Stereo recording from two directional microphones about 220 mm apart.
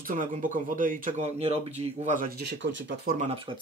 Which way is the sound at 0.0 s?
40° right (ahead or behind).